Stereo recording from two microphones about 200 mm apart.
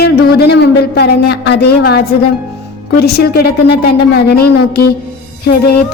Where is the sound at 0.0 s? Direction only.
50° left (ahead or behind).